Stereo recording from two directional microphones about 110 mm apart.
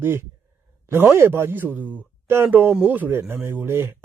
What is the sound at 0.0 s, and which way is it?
A man's voice, 20° right (ahead or behind).